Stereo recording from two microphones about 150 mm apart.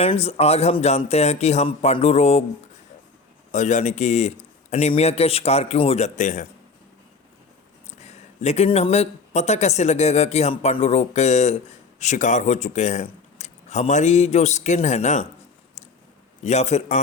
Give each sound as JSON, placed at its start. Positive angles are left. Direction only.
{"t": 0.0, "sound": "a man's voice", "side_deg": 45}
{"t": 3.5, "sound": "a man's voice", "side_deg": 55}
{"t": 7.9, "sound": "speech", "side_deg": 50}
{"t": 16.4, "sound": "a man's voice", "side_deg": 50}